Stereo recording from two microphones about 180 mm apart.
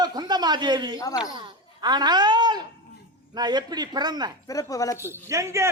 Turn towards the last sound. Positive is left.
turn(degrees=-15)  # may be behind; listen again after turning